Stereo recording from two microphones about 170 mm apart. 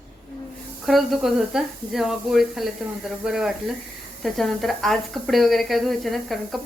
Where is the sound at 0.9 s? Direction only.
Centre (ahead or behind).